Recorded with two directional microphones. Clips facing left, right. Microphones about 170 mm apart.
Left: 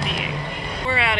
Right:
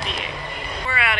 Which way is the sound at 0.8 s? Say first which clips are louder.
Left 3 dB; 25° left (ahead or behind).